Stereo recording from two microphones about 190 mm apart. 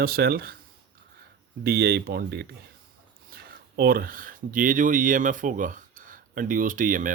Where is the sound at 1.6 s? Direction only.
55° right (ahead or behind).